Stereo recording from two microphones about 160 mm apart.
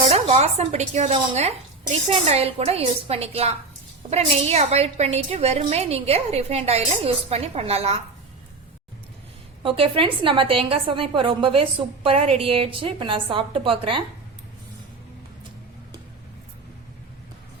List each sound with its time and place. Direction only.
0.1 s a woman's voice: 45° right (ahead or behind)
9.6 s a woman's voice: 35° right (ahead or behind)